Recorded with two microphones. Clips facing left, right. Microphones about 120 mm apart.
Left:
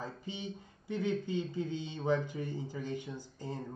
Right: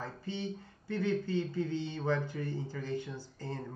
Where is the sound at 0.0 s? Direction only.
15° left (ahead or behind).